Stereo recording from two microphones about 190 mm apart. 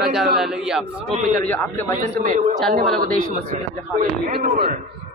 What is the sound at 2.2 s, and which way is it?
Speech, 35° right (ahead or behind).